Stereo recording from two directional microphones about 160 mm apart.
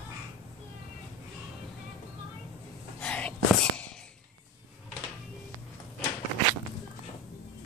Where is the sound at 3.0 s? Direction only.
5° left (ahead or behind).